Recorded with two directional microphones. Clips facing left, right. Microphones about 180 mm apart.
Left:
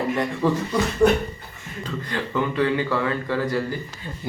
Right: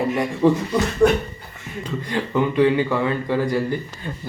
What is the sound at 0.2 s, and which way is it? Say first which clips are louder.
Speech: right 4 dB; 15° right (ahead or behind).